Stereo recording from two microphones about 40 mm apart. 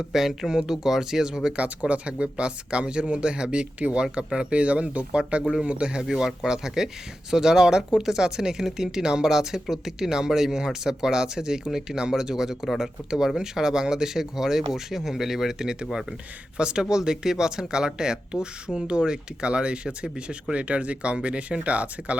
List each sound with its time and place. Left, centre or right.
0.1 s speech: centre
1.5 s speech: right; by 12.9 s centre
13.1 s speech: centre; by 22.1 s right